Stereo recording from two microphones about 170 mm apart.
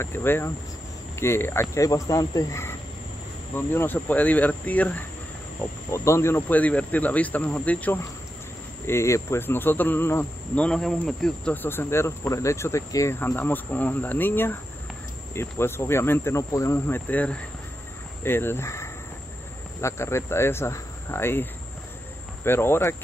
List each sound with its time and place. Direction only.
0.0 s speech: 15° left (ahead or behind)